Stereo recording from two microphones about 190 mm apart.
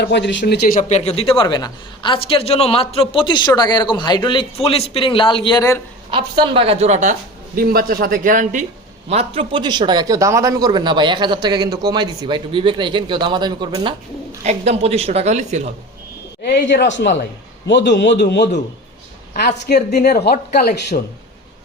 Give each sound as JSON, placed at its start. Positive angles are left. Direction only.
{"t": 0.0, "sound": "a man's voice", "side_deg": 65}
{"t": 6.1, "sound": "a woman's voice", "side_deg": -25}
{"t": 9.0, "sound": "a man's voice", "side_deg": -30}
{"t": 14.4, "sound": "a woman's voice", "side_deg": -35}
{"t": 16.4, "sound": "a man's voice", "side_deg": 60}
{"t": 19.6, "sound": "speech", "side_deg": 60}